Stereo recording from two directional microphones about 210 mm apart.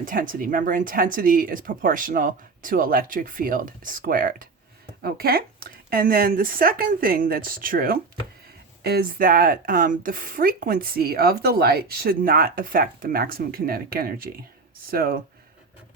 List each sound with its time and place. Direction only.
0.0 s speech: 40° right (ahead or behind)